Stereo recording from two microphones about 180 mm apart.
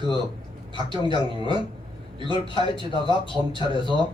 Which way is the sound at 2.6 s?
25° left (ahead or behind).